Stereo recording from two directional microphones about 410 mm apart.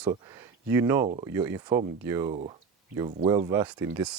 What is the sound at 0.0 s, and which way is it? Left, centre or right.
Speech, centre.